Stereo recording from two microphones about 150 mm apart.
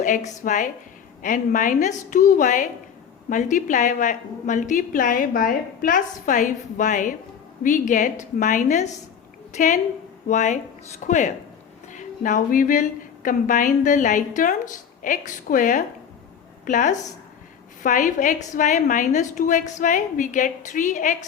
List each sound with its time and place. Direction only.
0.0 s a woman's voice: 60° left (ahead or behind)